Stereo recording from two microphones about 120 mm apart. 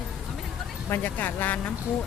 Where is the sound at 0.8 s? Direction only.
15° left (ahead or behind).